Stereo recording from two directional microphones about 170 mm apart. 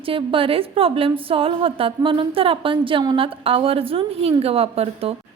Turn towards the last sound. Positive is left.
turn(degrees=-35)  # may be behind; listen again after turning